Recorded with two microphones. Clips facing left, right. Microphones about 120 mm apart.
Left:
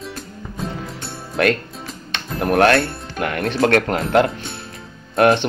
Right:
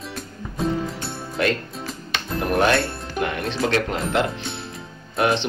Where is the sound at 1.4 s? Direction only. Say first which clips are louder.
Left 4 dB; 70° left (ahead or behind).